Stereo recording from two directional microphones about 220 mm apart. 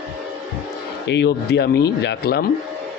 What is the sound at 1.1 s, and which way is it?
A man's voice, 50° left (ahead or behind).